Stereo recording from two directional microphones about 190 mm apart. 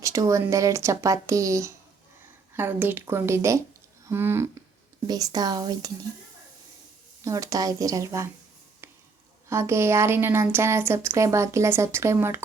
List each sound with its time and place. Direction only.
0.0 s a woman's voice: 15° right (ahead or behind)
7.2 s a woman's voice: 15° right (ahead or behind)
9.5 s a woman's voice: 15° right (ahead or behind)